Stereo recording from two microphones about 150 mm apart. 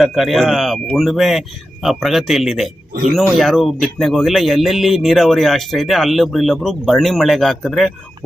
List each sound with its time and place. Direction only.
0.0 s speech: centre (ahead or behind)
2.9 s speech: 80° right
3.2 s speech: centre (ahead or behind)